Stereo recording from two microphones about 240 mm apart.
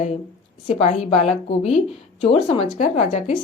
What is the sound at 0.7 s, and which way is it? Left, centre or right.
Speech, left.